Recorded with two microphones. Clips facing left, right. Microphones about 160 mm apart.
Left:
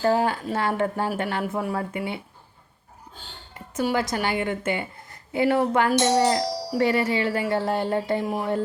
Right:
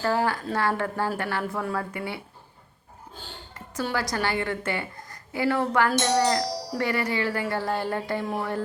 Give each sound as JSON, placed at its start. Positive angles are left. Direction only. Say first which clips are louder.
{"t": 0.0, "sound": "a woman's voice", "louder": "left 3 dB", "side_deg": 20}
{"t": 3.8, "sound": "a woman's voice", "louder": "left 3 dB", "side_deg": 20}